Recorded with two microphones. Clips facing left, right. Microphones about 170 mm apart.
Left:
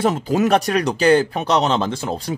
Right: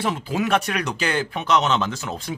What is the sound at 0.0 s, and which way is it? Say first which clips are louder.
Speech: left 6 dB; 40° left (ahead or behind).